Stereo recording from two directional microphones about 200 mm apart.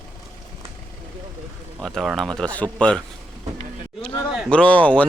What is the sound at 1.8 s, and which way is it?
A man's voice, centre (ahead or behind).